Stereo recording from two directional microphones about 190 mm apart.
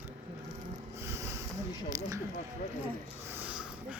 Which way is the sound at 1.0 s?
15° right (ahead or behind).